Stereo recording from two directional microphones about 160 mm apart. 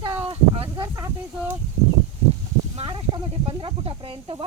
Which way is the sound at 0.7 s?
25° right (ahead or behind).